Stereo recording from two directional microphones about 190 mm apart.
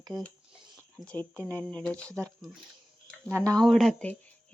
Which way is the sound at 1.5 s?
5° left (ahead or behind).